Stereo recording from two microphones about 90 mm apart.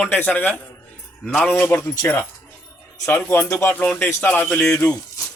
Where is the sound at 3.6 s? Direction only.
20° left (ahead or behind).